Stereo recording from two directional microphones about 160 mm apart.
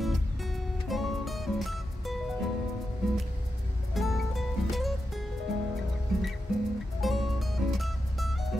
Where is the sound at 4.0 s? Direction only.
Centre (ahead or behind).